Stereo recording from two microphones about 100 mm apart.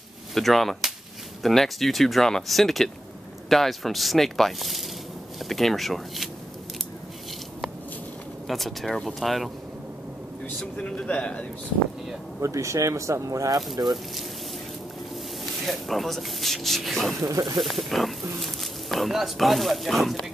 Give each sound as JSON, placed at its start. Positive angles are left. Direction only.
{"t": 0.3, "sound": "speech", "side_deg": 0}
{"t": 8.5, "sound": "speech", "side_deg": 0}
{"t": 10.6, "sound": "a man's voice", "side_deg": 10}
{"t": 12.4, "sound": "speech", "side_deg": -30}
{"t": 15.6, "sound": "speech", "side_deg": 0}
{"t": 17.2, "sound": "speech", "side_deg": -35}
{"t": 17.6, "sound": "speech", "side_deg": 0}